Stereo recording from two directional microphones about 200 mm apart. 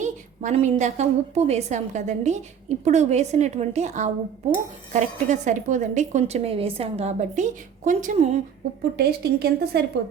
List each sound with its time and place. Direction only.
0.0 s a woman's voice: 35° right (ahead or behind)
9.0 s a woman's voice: 50° right (ahead or behind)